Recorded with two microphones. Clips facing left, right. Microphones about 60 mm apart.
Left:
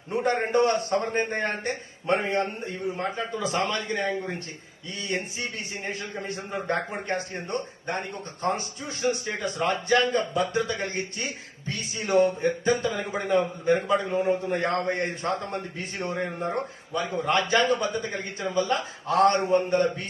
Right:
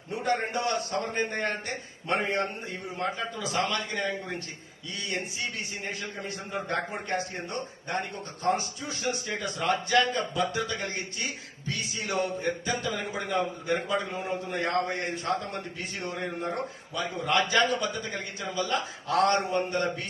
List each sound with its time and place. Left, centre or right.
0.1 s a man's voice: left
4.9 s a man's voice: left